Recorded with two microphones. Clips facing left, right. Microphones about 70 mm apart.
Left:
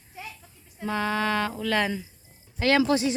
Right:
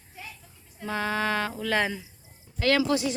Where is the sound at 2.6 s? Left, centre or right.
Left.